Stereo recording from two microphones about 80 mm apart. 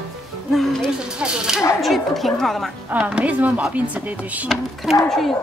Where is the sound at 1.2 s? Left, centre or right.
Centre.